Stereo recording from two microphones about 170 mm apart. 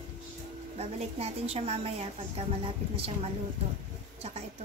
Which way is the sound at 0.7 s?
40° right (ahead or behind).